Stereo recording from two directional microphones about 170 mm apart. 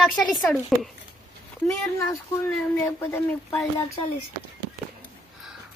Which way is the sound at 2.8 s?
15° left (ahead or behind).